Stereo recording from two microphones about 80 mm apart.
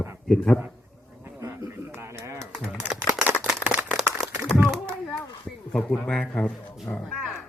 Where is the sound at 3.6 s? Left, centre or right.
Centre.